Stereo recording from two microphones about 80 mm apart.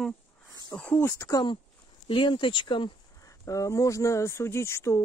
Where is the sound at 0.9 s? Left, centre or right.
Left.